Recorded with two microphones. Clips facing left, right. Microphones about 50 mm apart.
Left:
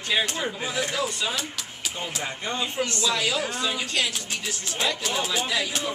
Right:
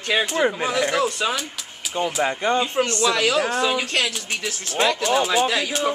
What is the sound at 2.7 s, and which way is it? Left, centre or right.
A woman's voice, right.